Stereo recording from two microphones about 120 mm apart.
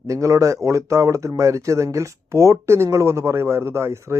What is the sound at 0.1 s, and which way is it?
Speech, 25° right (ahead or behind).